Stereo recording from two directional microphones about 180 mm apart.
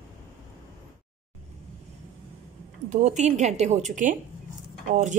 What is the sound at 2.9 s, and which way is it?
A woman's voice, 40° right (ahead or behind).